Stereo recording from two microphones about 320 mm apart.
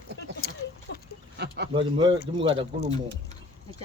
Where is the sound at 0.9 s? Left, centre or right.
Left.